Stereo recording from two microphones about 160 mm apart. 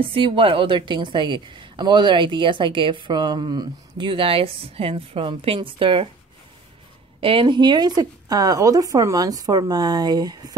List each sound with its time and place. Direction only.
0.1 s a woman's voice: 35° right (ahead or behind)
7.2 s speech: 35° right (ahead or behind)